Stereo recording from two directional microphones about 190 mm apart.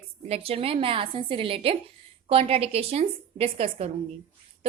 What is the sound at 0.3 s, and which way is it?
A woman's voice, 30° right (ahead or behind).